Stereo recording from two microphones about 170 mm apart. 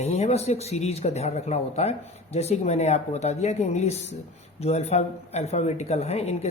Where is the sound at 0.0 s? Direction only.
40° left (ahead or behind).